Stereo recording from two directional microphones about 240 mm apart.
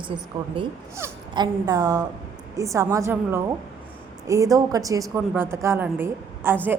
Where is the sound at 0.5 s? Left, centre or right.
Centre.